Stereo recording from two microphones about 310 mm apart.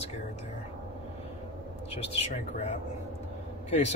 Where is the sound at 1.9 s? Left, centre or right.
Centre.